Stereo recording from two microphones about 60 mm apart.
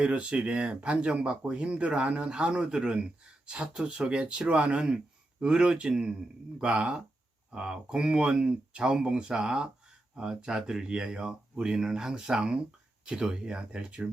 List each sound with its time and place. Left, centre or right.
0.0 s speech: centre